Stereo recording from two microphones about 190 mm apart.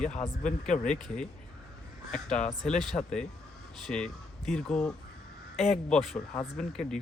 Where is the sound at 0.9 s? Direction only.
5° left (ahead or behind).